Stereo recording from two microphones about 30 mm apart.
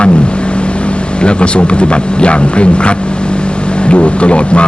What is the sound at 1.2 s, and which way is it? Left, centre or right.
Speech, left.